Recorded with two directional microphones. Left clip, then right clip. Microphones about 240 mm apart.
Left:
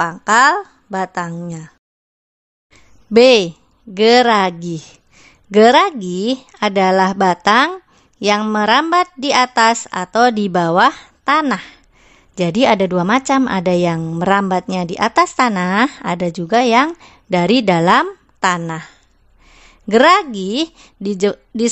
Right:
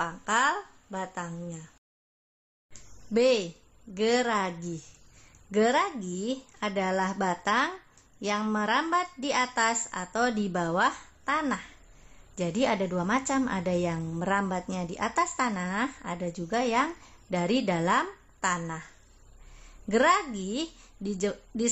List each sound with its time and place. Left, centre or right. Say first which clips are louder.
0.0 s a woman's voice: left 14 dB; left
3.1 s a woman's voice: left 15 dB; left
19.9 s a woman's voice: left 13 dB; left